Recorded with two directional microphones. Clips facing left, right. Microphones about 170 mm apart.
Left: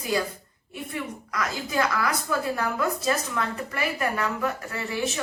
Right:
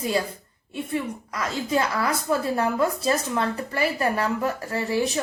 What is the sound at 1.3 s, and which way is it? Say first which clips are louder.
A woman's voice: right 5 dB; 30° right (ahead or behind).